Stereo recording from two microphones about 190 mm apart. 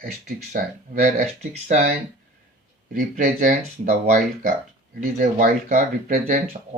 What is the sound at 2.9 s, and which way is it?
Speech, 45° right (ahead or behind).